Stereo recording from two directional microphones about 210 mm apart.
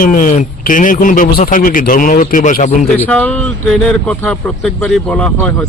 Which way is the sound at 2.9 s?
10° left (ahead or behind).